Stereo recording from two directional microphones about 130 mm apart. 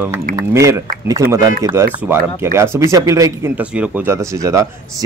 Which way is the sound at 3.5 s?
10° right (ahead or behind).